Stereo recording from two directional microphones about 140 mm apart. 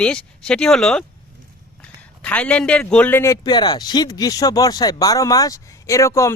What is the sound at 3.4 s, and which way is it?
Speech, 30° left (ahead or behind).